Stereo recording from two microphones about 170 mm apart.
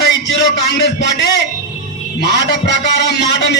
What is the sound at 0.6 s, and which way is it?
A man's voice, 90° left.